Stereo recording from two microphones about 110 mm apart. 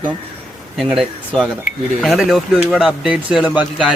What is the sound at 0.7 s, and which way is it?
A man's voice, centre (ahead or behind).